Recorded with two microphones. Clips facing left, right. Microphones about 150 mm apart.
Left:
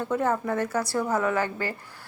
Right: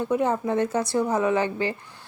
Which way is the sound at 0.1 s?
20° right (ahead or behind).